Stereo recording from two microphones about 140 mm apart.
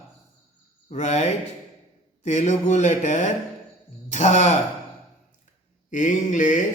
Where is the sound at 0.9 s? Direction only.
55° left (ahead or behind).